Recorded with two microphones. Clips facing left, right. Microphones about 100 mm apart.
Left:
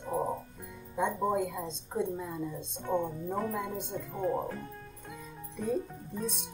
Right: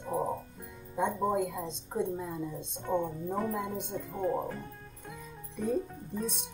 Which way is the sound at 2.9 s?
Centre (ahead or behind).